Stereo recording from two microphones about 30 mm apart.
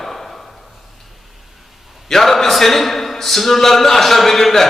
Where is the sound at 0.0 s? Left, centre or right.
Centre.